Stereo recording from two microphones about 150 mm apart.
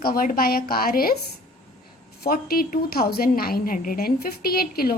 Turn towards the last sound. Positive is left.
turn(degrees=85)